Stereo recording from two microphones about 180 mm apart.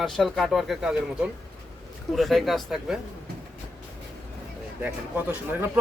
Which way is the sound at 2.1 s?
Centre (ahead or behind).